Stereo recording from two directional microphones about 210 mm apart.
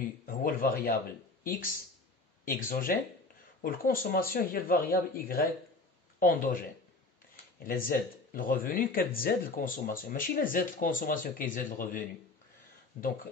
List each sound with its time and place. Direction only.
0.4 s speech: 45° left (ahead or behind)
2.4 s speech: 40° left (ahead or behind)